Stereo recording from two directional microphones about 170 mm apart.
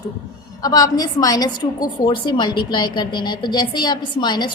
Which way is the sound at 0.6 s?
20° left (ahead or behind).